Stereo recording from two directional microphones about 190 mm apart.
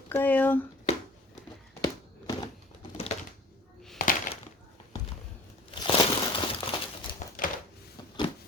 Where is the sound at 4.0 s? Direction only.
45° left (ahead or behind).